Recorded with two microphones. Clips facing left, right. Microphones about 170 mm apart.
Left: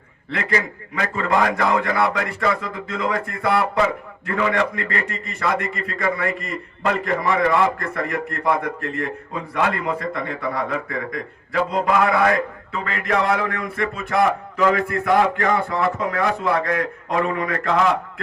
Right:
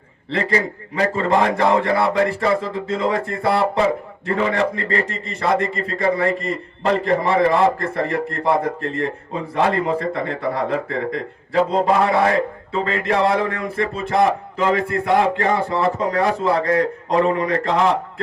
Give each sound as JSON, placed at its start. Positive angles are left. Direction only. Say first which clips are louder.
{"t": 0.3, "sound": "a man's voice", "louder": "right 3 dB", "side_deg": -30}